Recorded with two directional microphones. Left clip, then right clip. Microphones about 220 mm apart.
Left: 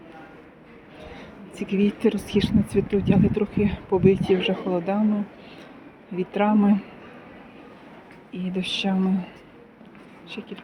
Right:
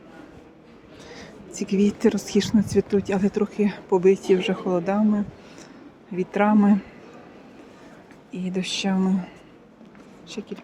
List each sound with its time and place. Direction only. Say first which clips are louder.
1.0 s speech: right 1 dB; 20° right (ahead or behind)
6.1 s speech: right 2 dB; 15° right (ahead or behind)
8.3 s speech: even; 15° right (ahead or behind)
10.2 s speech: right 2 dB; 15° right (ahead or behind)